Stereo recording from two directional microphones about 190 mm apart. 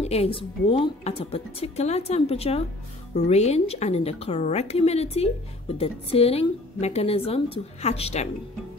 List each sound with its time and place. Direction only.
0.0 s speech: 35° left (ahead or behind)